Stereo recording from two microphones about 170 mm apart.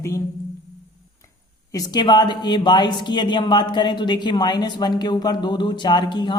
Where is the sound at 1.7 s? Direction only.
25° left (ahead or behind).